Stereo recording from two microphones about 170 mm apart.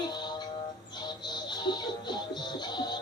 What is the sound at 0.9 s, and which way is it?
Music, 25° left (ahead or behind).